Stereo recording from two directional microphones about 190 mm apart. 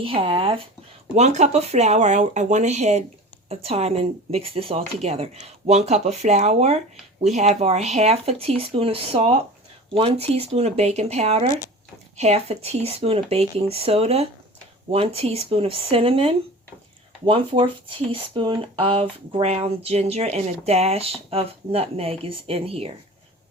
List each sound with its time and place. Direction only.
0.0 s speech: 30° right (ahead or behind)